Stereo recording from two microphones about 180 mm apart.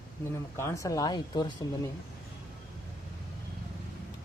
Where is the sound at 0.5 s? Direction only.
15° left (ahead or behind).